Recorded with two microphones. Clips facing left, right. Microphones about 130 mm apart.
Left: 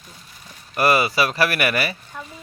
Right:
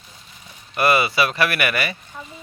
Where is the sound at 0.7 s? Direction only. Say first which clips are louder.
Even; 40° left (ahead or behind).